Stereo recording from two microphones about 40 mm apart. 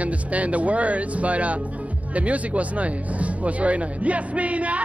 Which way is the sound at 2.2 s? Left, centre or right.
Right.